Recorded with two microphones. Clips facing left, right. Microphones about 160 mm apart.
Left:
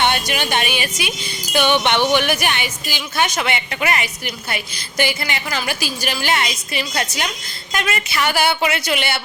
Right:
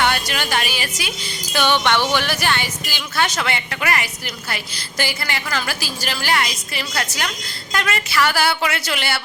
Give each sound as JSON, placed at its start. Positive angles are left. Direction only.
{"t": 0.0, "sound": "speech", "side_deg": 20}